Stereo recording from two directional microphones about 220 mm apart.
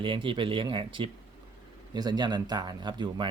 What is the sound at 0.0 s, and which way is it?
Speech, 25° right (ahead or behind).